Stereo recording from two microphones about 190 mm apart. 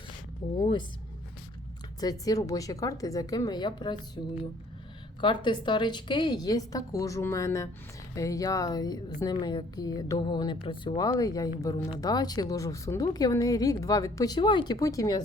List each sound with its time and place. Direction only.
0.6 s a woman's voice: 25° left (ahead or behind)
2.0 s a woman's voice: 20° left (ahead or behind)
5.2 s a woman's voice: 25° left (ahead or behind)